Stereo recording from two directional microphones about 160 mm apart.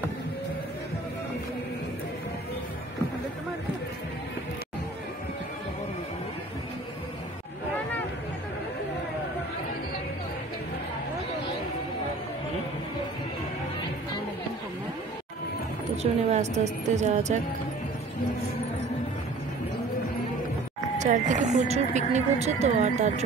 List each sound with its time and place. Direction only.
16.0 s speech: 45° right (ahead or behind)
21.0 s speech: 50° right (ahead or behind)